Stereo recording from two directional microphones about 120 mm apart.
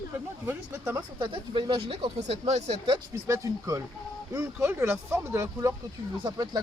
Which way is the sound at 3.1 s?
25° right (ahead or behind).